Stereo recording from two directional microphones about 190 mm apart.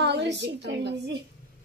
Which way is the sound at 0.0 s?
65° right (ahead or behind).